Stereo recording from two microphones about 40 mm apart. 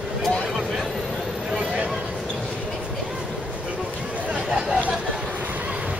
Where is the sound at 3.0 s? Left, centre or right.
Centre.